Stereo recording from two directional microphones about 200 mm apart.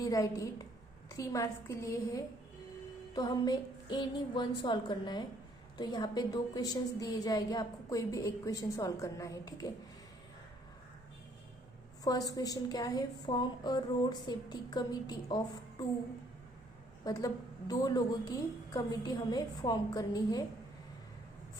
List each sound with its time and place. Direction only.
0.0 s a woman's voice: 15° left (ahead or behind)
12.0 s a woman's voice: 20° left (ahead or behind)
17.0 s a woman's voice: 20° left (ahead or behind)